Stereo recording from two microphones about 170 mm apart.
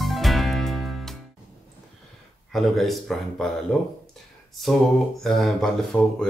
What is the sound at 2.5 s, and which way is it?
Speech, centre (ahead or behind).